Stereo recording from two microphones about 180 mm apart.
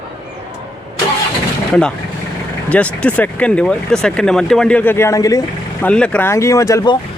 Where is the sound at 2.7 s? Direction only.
5° left (ahead or behind).